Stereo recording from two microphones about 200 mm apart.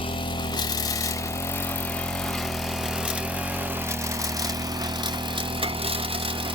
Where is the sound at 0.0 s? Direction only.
25° left (ahead or behind).